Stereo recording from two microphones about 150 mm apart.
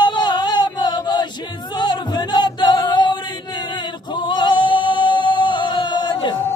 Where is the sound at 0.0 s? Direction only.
30° left (ahead or behind).